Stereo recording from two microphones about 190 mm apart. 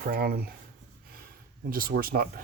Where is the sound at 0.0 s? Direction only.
55° right (ahead or behind).